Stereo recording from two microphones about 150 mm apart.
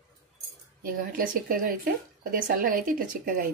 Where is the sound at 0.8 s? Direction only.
70° right (ahead or behind).